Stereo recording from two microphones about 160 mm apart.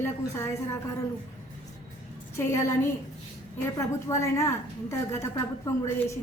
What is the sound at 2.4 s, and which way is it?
A woman's voice, 15° left (ahead or behind).